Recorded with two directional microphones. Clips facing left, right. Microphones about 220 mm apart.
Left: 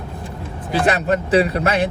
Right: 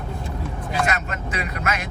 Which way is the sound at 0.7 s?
35° left (ahead or behind).